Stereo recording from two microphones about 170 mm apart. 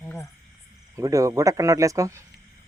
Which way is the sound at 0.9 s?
20° right (ahead or behind).